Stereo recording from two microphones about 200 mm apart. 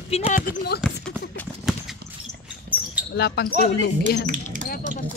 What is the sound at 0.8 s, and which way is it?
Clip-clop, centre (ahead or behind).